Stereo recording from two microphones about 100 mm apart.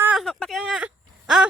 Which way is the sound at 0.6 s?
10° right (ahead or behind).